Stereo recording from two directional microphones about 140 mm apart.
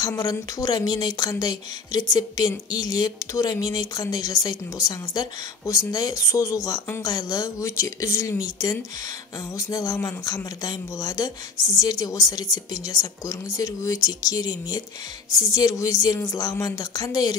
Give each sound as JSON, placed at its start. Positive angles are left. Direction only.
{"t": 0.1, "sound": "speech", "side_deg": 25}